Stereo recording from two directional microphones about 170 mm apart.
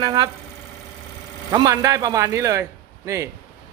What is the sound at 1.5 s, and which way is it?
Speech, 20° right (ahead or behind).